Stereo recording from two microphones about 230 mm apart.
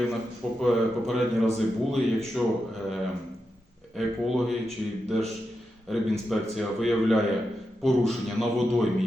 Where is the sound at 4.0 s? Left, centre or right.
Centre.